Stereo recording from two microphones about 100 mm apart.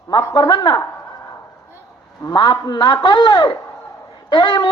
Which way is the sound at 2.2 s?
45° left (ahead or behind).